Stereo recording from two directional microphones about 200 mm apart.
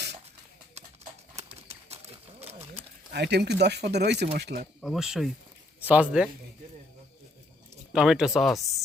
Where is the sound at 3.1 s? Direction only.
55° right (ahead or behind).